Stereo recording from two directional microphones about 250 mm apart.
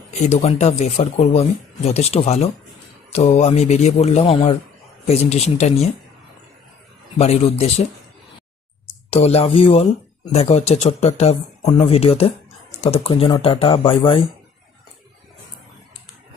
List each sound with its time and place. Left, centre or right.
0.1 s speech: left
7.2 s speech: left
9.0 s speech: left